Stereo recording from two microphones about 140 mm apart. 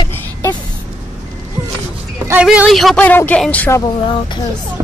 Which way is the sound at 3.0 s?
15° left (ahead or behind).